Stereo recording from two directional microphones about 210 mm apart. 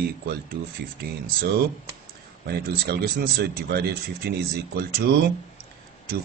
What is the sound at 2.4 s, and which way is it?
A man's voice, 50° right (ahead or behind).